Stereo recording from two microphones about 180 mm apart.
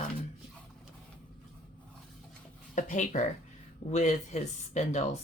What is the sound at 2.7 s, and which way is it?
Speech, 45° left (ahead or behind).